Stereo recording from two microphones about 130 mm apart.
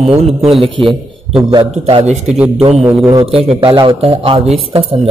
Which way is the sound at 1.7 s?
50° right (ahead or behind).